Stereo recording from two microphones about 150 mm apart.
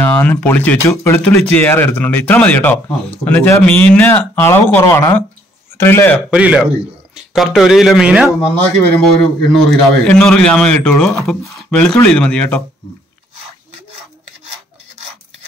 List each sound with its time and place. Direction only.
0.0 s speech: 15° left (ahead or behind)
6.3 s a man's voice: 5° right (ahead or behind); by 12.6 s 10° left (ahead or behind)